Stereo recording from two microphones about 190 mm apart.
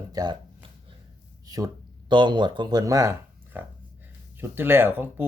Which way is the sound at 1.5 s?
20° right (ahead or behind).